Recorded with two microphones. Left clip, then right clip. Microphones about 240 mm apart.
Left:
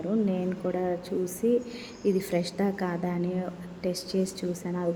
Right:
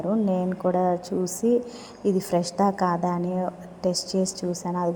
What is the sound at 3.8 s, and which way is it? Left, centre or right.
A woman's voice, centre.